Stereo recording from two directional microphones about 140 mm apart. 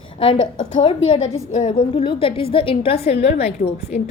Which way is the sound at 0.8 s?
40° left (ahead or behind).